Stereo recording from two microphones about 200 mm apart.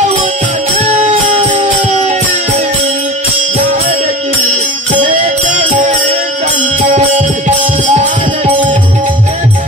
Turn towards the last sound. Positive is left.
turn(degrees=-35)  # may be behind; listen again after turning